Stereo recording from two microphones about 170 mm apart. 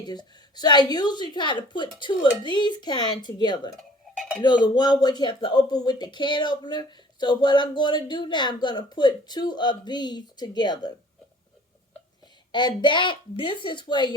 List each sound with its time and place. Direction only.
0.0 s speech: 25° left (ahead or behind)
3.8 s dishes: centre (ahead or behind)
4.4 s speech: 25° left (ahead or behind)
12.5 s speech: 25° left (ahead or behind)